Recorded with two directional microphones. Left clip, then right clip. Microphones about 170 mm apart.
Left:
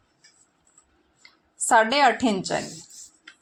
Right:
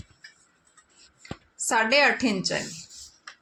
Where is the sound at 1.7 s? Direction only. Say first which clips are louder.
Left 3 dB; 25° left (ahead or behind).